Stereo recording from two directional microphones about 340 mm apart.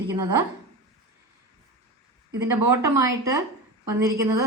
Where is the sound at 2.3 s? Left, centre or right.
Centre.